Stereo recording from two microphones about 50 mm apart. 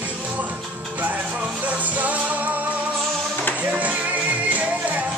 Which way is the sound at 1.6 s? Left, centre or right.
Right.